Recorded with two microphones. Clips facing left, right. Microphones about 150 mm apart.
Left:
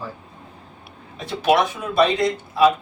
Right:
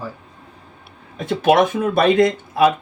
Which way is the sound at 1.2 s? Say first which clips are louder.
Right 4 dB; 50° right (ahead or behind).